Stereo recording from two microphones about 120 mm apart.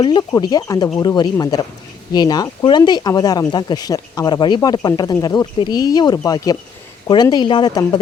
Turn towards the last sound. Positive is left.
turn(degrees=35)  # may be behind; listen again after turning